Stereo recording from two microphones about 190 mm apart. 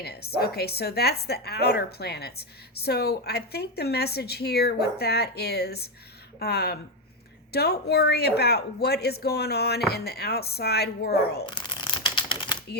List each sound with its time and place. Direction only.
0.0 s a woman's voice: 55° left (ahead or behind)
11.4 s typewriter: 25° left (ahead or behind)